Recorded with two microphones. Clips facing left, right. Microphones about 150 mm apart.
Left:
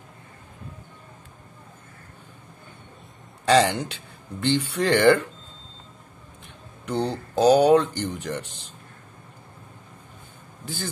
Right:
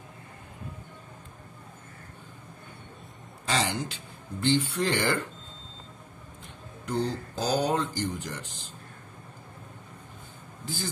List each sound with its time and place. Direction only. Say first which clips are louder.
3.4 s speech: left 10 dB; 70° left (ahead or behind)
6.9 s speech: left 3 dB; 75° left (ahead or behind)
10.6 s speech: left 2 dB; 60° left (ahead or behind)